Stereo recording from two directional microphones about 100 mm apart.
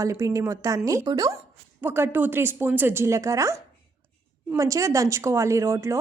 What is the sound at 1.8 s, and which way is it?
A woman's voice, 20° right (ahead or behind).